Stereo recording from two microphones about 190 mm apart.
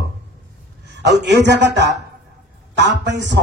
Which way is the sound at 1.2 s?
65° right (ahead or behind).